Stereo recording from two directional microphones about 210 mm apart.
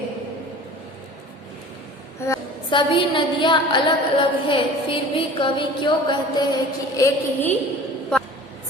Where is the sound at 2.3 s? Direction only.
25° left (ahead or behind).